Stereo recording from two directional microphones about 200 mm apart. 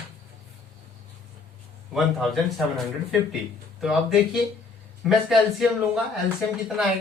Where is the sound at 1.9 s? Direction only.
Centre (ahead or behind).